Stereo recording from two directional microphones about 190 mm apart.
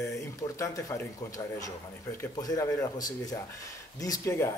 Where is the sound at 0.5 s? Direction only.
15° left (ahead or behind).